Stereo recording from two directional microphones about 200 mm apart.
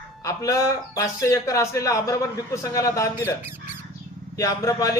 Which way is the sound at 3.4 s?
10° right (ahead or behind).